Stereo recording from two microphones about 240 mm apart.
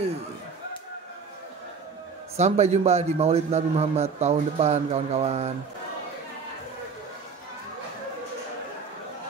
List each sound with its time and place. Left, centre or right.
2.3 s a man's voice: right